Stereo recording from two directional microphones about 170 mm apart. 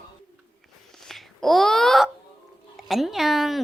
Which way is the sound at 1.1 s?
Centre (ahead or behind).